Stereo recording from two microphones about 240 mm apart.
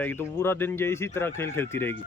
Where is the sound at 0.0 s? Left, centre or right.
Centre.